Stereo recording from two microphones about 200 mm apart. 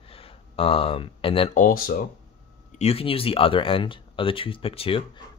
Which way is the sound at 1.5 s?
45° left (ahead or behind).